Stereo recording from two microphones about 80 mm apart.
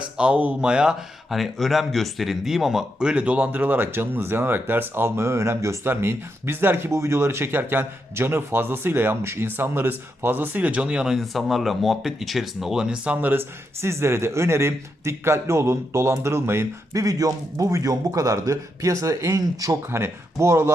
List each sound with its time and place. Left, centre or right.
0.2 s speech: centre
13.1 s a man's voice: right
16.9 s a man's voice: right
19.9 s a man's voice: right